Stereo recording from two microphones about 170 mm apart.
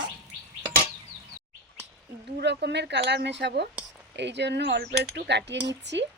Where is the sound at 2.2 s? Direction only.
80° right.